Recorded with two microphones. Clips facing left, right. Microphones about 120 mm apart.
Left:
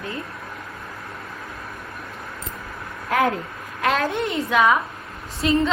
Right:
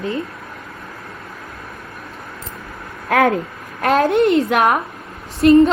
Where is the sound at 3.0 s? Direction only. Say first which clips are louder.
Right 5 dB; 90° right.